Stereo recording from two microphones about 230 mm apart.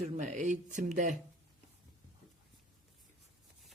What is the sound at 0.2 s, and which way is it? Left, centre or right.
Speech, right.